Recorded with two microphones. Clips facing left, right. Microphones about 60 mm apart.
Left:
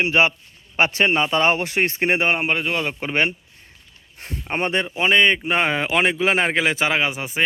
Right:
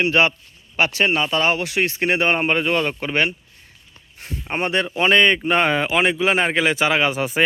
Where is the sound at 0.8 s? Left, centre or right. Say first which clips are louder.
Left 1 dB; left.